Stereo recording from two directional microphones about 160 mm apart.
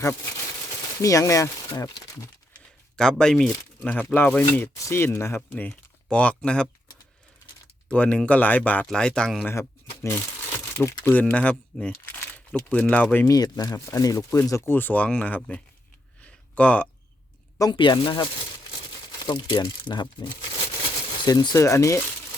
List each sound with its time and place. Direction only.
1.0 s speech: 20° left (ahead or behind)
2.9 s speech: 5° left (ahead or behind)
7.9 s speech: 10° left (ahead or behind)
9.5 s speech: 15° left (ahead or behind)
13.2 s speech: 20° left (ahead or behind)
16.2 s a sound: 10° left (ahead or behind)
17.6 s speech: 30° left (ahead or behind)
19.3 s speech: 30° left (ahead or behind)
21.2 s speech: 25° left (ahead or behind)